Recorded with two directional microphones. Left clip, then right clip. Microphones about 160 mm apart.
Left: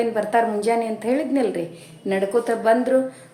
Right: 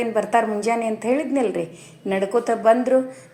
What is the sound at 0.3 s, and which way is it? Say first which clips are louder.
A woman's voice: left 1 dB; 15° right (ahead or behind).